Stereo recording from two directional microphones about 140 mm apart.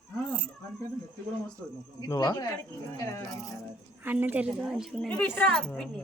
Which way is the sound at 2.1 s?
25° left (ahead or behind).